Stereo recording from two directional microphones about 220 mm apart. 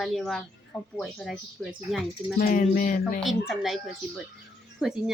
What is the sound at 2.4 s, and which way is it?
Speech, 35° left (ahead or behind).